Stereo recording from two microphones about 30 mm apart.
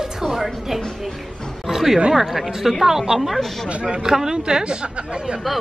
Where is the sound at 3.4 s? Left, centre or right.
Centre.